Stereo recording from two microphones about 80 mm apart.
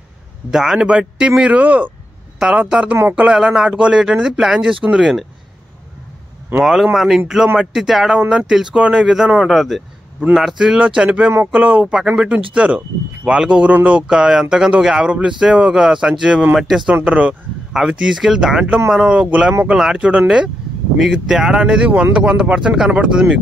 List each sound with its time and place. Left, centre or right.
0.5 s speech: centre
3.3 s speech: centre
6.6 s speech: centre
17.0 s speech: centre
17.7 s speech: centre